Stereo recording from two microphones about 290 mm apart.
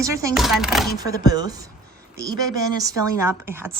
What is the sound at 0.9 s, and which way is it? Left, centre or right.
Speech, centre.